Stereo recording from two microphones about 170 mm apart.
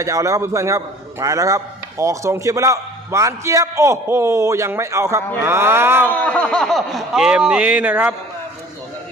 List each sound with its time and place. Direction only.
0.0 s a man's voice: 20° right (ahead or behind)
6.1 s speech: 10° left (ahead or behind); by 8.1 s 10° right (ahead or behind)